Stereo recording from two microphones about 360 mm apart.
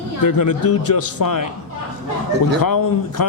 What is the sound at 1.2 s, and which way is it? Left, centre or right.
Speech, left.